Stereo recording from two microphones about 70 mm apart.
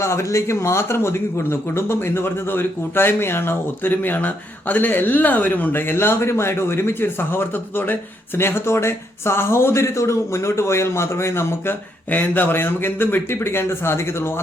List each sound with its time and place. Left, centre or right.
0.0 s speech: left
12.1 s speech: left